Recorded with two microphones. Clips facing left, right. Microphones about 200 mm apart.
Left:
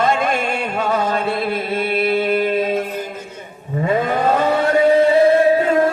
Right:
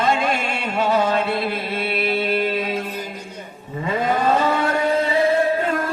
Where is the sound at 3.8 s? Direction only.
55° left (ahead or behind).